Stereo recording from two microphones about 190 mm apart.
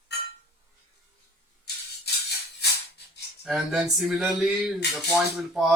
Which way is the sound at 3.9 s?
Centre (ahead or behind).